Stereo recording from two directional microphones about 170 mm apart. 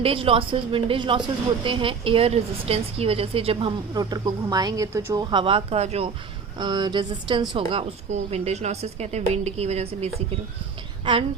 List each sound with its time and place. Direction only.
0.0 s speech: 30° right (ahead or behind)
6.6 s speech: 25° right (ahead or behind)